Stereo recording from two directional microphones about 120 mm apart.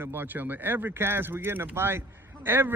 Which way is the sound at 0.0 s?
20° right (ahead or behind).